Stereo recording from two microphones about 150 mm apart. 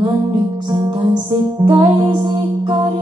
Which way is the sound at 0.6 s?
30° right (ahead or behind).